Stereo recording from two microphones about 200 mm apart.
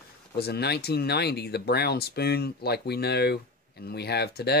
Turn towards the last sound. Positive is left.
turn(degrees=55)  # may be behind; listen again after turning